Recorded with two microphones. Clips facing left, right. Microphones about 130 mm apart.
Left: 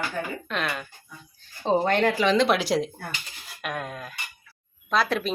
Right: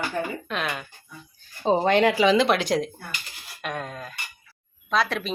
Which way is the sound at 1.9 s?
15° right (ahead or behind).